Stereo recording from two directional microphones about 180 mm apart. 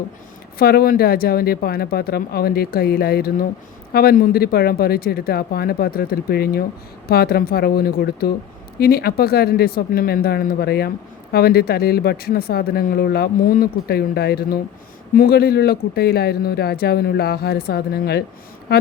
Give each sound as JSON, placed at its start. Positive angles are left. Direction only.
{"t": 0.6, "sound": "speech", "side_deg": 60}